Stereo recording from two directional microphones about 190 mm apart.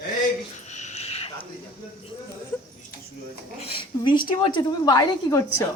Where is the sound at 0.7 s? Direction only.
35° left (ahead or behind).